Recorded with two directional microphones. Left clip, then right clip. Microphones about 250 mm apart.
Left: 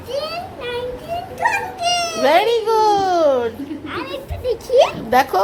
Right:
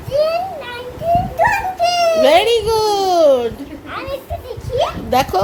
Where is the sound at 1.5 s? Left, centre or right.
Centre.